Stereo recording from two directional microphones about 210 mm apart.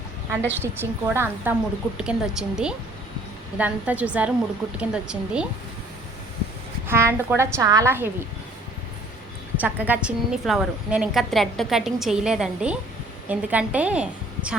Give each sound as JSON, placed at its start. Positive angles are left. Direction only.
{"t": 0.4, "sound": "a woman's voice", "side_deg": -10}
{"t": 6.8, "sound": "a woman's voice", "side_deg": -10}
{"t": 9.6, "sound": "a woman's voice", "side_deg": -10}